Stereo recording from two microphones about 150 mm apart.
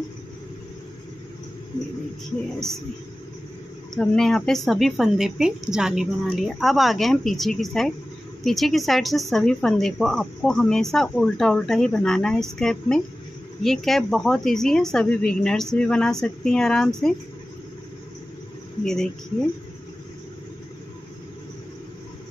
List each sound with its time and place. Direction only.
3.9 s speech: 5° left (ahead or behind)